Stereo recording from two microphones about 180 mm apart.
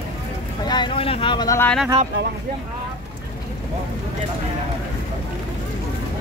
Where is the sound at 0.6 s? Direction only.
25° left (ahead or behind).